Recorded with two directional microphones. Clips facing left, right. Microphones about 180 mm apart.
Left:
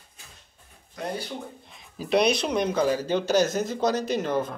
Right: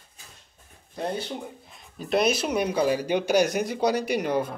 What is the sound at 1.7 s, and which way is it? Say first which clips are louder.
Speech: left 2 dB; centre (ahead or behind).